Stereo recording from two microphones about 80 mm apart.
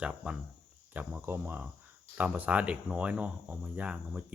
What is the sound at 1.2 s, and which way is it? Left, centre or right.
Speech, right.